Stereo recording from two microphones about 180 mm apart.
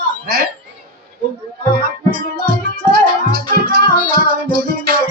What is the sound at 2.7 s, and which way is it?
Music, 60° right (ahead or behind).